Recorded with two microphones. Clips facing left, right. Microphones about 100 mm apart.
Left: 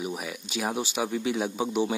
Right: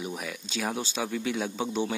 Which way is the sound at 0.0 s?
10° left (ahead or behind).